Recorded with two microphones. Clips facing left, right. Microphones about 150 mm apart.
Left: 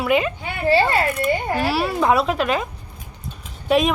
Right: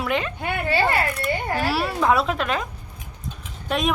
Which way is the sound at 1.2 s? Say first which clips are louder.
Left 3 dB; 5° left (ahead or behind).